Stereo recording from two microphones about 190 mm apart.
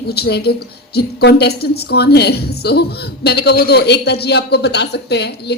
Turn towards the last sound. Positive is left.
turn(degrees=60)  # may be behind; listen again after turning